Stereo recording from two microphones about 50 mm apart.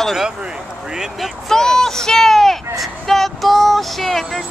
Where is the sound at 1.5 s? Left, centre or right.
Centre.